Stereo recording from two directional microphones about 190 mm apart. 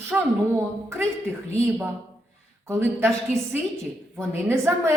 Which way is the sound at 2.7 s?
15° right (ahead or behind).